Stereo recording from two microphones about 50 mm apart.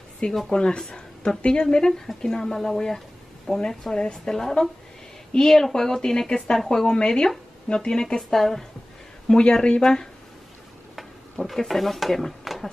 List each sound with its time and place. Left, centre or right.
0.5 s speech: centre
11.4 s speech: centre